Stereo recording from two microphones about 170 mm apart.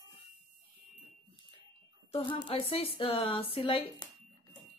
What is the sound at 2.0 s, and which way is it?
Speech, 30° left (ahead or behind).